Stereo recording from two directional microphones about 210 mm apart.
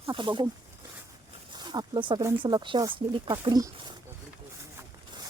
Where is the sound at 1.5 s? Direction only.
20° right (ahead or behind).